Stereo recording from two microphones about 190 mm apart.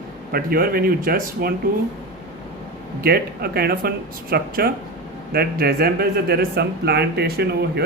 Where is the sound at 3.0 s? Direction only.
55° right (ahead or behind).